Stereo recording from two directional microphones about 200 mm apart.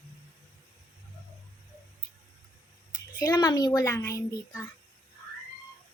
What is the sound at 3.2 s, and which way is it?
A child's voice, 20° left (ahead or behind).